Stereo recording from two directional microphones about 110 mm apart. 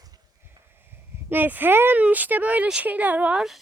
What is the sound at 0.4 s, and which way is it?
Speech, 20° right (ahead or behind).